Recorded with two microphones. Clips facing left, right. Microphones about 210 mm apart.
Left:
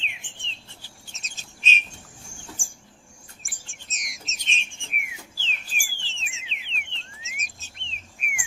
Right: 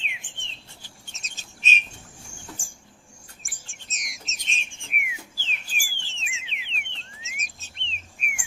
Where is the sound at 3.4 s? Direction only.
Centre (ahead or behind).